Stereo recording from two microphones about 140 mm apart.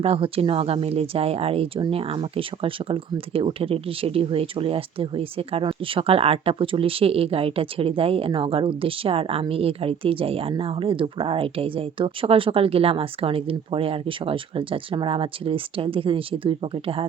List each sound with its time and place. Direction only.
0.0 s speech: 45° right (ahead or behind)